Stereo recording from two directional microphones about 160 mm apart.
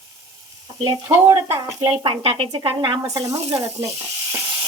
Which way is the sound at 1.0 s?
20° right (ahead or behind).